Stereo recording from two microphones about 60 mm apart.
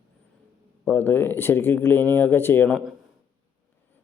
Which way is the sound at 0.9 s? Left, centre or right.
Left.